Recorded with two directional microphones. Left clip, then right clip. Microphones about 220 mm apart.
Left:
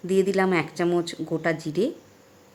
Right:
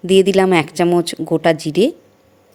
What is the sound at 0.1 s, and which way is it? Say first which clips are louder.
A woman's voice: right 10 dB; 30° right (ahead or behind).